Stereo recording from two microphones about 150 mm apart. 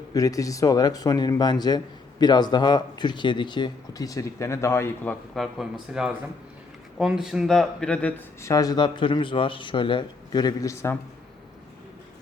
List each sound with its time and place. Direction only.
0.1 s speech: 25° left (ahead or behind)
5.3 s speech: centre (ahead or behind)
8.4 s a man's voice: 25° left (ahead or behind)